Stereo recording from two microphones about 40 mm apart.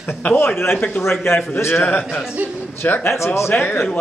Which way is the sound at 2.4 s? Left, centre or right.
Right.